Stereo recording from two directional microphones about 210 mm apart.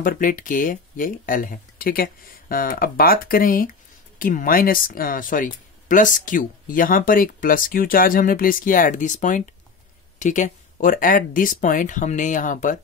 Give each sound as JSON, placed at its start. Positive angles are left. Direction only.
{"t": 0.0, "sound": "speech", "side_deg": 40}